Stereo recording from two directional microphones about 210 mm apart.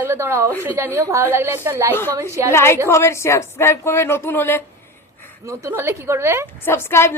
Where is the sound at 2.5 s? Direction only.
10° left (ahead or behind).